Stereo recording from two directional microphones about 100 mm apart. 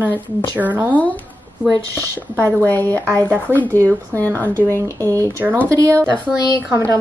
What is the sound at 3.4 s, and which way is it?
Speech, 15° left (ahead or behind).